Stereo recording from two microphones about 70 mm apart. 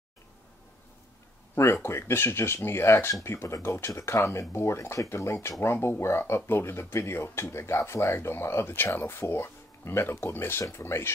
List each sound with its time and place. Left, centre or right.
1.5 s speech: left